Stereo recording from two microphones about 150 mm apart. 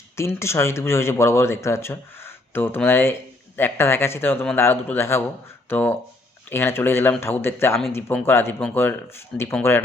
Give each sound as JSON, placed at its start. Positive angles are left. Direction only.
{"t": 0.2, "sound": "speech", "side_deg": 20}